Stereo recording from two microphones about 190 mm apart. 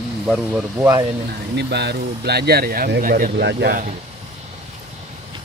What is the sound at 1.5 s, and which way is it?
Speech, 60° right (ahead or behind).